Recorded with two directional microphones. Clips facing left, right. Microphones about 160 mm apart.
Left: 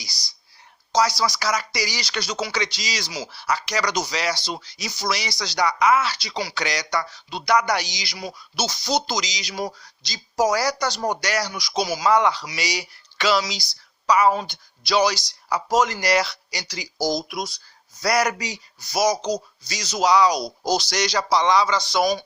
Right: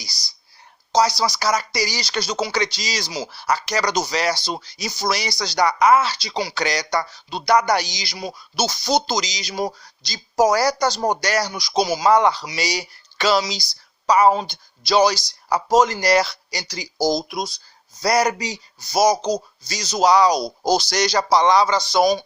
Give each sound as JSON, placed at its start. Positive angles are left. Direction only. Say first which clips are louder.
{"t": 1.2, "sound": "speech", "louder": "right 3 dB", "side_deg": -30}
{"t": 3.2, "sound": "speech", "louder": "right 2 dB", "side_deg": -45}
{"t": 6.1, "sound": "speech", "louder": "right 3 dB", "side_deg": -25}
{"t": 12.0, "sound": "speech", "louder": "right 2 dB", "side_deg": -35}
{"t": 19.1, "sound": "speech", "louder": "right 3 dB", "side_deg": -45}